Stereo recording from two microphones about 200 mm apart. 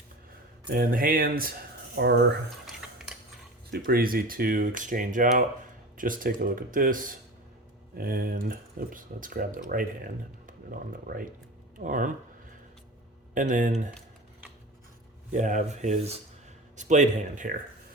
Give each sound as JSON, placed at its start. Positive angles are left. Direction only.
{"t": 0.7, "sound": "speech", "side_deg": -45}
{"t": 2.0, "sound": "speech", "side_deg": -55}
{"t": 3.7, "sound": "a man's voice", "side_deg": -50}
{"t": 13.3, "sound": "a man's voice", "side_deg": -40}
{"t": 15.3, "sound": "a man's voice", "side_deg": -40}